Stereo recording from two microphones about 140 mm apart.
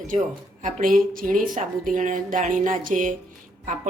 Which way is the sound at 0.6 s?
80° right.